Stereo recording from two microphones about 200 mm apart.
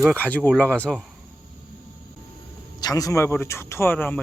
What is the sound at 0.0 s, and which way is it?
Speech, 5° left (ahead or behind).